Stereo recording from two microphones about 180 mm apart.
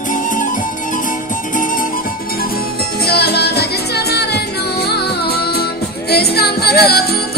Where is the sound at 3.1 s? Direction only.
60° left (ahead or behind).